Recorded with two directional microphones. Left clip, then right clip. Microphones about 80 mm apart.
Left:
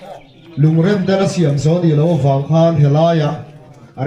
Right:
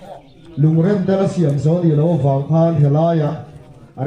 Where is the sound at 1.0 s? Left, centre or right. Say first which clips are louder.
Left 2 dB; left.